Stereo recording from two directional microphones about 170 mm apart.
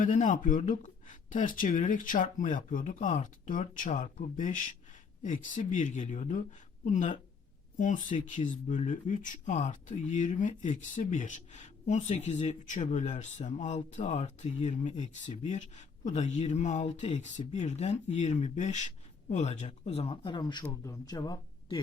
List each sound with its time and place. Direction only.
0.0 s speech: 50° left (ahead or behind); by 21.8 s 25° left (ahead or behind)